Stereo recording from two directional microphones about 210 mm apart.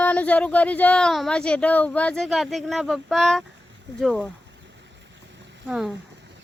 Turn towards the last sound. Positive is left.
turn(degrees=0)  # may be behind; listen again after turning